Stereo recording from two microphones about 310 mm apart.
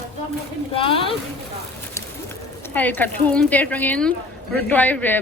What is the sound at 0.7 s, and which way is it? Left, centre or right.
Speech, centre.